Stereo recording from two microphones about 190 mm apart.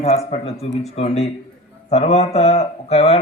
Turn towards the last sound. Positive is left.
turn(degrees=35)  # may be behind; listen again after turning